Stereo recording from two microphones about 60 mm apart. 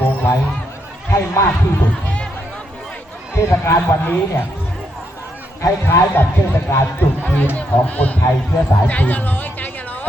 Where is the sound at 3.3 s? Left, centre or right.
Left.